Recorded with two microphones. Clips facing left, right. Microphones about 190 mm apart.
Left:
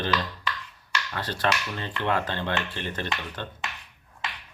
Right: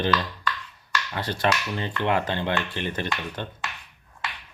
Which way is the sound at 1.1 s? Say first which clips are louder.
Right 2 dB; 15° right (ahead or behind).